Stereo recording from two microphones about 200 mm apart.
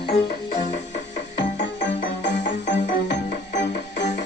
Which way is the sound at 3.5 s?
60° left (ahead or behind).